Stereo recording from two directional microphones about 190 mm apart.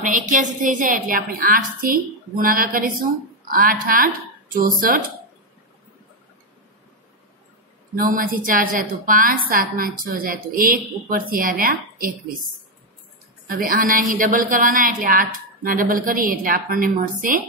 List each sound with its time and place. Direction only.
0.0 s a woman's voice: 40° right (ahead or behind)
7.9 s a woman's voice: 50° right (ahead or behind)
13.5 s a woman's voice: 45° right (ahead or behind)